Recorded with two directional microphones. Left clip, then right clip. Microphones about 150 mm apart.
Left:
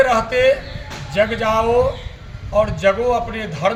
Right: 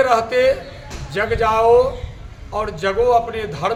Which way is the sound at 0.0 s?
25° right (ahead or behind).